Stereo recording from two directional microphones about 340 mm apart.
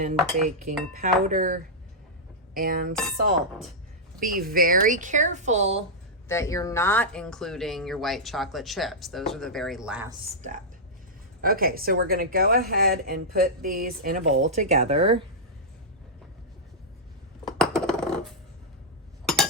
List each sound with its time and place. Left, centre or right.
0.9 s speech: right
2.9 s speech: centre
4.2 s speech: right
6.2 s speech: centre
11.3 s speech: right
17.4 s a sound: centre